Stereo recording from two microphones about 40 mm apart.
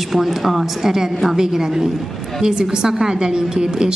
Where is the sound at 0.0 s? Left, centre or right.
Centre.